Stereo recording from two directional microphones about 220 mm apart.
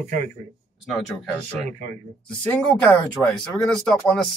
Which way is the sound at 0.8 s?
Centre (ahead or behind).